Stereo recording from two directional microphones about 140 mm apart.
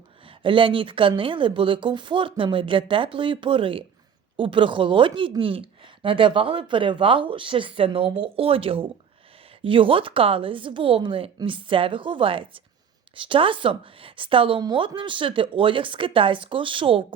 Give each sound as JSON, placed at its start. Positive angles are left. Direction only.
{"t": 0.3, "sound": "a woman's voice", "side_deg": -35}